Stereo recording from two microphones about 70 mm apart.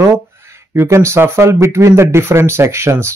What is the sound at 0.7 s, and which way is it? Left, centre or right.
Speech, right.